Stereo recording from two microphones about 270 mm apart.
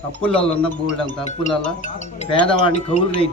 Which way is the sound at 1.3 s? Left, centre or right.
Left.